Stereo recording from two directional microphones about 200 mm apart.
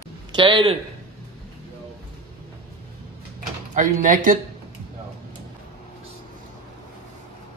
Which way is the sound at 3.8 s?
45° right (ahead or behind).